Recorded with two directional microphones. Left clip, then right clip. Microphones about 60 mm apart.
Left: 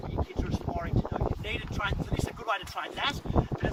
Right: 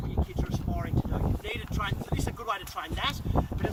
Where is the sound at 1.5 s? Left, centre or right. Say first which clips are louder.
Left 1 dB; left.